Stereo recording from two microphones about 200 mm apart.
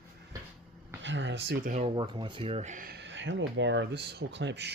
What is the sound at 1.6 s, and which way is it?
Speech, 35° right (ahead or behind).